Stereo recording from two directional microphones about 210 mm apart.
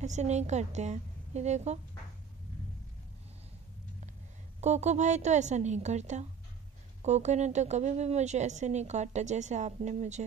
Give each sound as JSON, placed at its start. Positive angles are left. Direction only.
{"t": 0.0, "sound": "a woman's voice", "side_deg": -35}
{"t": 4.6, "sound": "a woman's voice", "side_deg": -35}